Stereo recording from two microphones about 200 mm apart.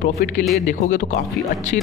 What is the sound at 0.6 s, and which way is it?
Speech, 40° left (ahead or behind).